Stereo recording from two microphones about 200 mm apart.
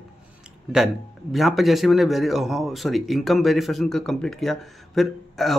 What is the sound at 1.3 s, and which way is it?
Speech, centre (ahead or behind).